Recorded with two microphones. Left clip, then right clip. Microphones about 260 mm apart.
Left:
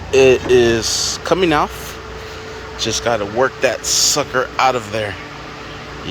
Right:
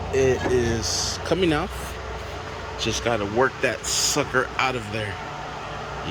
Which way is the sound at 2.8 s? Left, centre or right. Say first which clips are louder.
Left 7 dB; centre.